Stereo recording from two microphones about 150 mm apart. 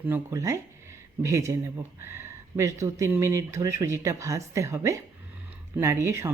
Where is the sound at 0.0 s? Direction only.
15° right (ahead or behind).